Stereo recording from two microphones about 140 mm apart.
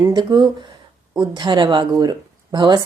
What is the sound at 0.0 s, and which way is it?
Speech, 30° right (ahead or behind).